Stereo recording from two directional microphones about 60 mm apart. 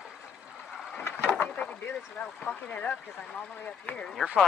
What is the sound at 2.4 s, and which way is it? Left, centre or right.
Speech, left.